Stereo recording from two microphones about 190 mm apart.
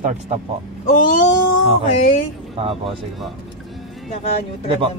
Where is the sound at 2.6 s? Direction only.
30° right (ahead or behind).